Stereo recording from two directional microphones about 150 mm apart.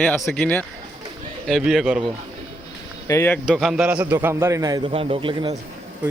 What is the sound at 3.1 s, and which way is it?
Speech, 15° left (ahead or behind).